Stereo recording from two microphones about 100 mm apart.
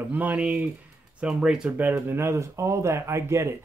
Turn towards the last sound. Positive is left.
turn(degrees=-30)  # may be behind; listen again after turning